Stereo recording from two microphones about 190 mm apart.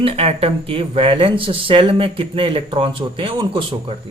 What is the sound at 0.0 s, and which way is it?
Speech, 30° right (ahead or behind).